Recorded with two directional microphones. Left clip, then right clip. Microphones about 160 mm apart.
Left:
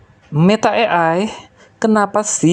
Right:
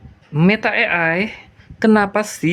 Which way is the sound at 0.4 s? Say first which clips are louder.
Left 3 dB; 25° left (ahead or behind).